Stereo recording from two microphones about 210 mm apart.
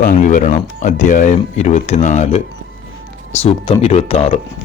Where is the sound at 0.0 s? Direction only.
35° left (ahead or behind).